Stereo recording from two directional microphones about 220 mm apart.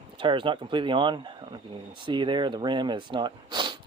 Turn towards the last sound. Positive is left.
turn(degrees=-20)  # may be behind; listen again after turning